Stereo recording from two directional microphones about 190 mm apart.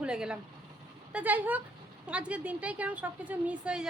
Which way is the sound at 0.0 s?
5° right (ahead or behind).